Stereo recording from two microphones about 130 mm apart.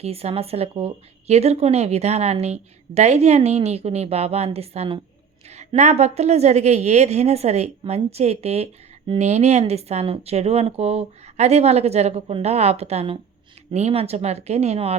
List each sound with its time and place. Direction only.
0.0 s speech: 50° right (ahead or behind)
5.5 s a woman's voice: 60° right (ahead or behind)